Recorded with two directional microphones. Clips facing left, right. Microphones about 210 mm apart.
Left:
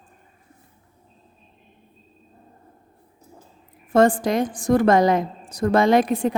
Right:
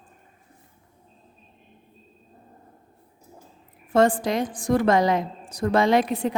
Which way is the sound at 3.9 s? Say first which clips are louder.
Left 3 dB; 45° left (ahead or behind).